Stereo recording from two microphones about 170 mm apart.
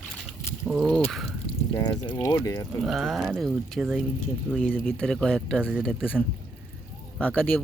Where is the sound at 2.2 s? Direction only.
20° left (ahead or behind).